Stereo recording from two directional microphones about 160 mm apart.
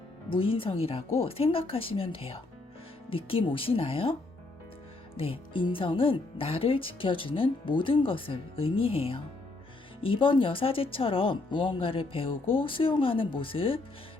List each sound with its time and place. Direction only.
0.3 s speech: 35° left (ahead or behind)
5.1 s speech: 35° left (ahead or behind)